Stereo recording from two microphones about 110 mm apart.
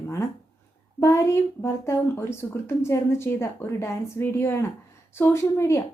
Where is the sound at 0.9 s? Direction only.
25° left (ahead or behind).